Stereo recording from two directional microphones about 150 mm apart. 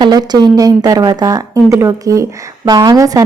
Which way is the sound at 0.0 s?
25° right (ahead or behind).